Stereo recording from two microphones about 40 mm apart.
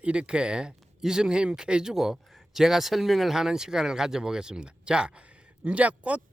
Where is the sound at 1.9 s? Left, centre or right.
Centre; by 6.2 s right.